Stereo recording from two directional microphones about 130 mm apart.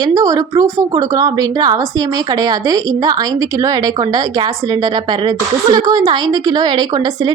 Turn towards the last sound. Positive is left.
turn(degrees=-35)  # may be behind; listen again after turning